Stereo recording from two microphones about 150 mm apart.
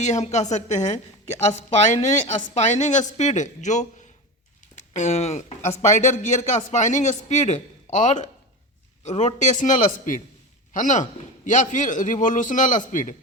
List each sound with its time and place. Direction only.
0.0 s a man's voice: 50° left (ahead or behind)